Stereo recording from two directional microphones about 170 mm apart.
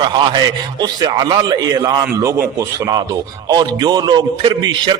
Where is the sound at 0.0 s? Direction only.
25° right (ahead or behind).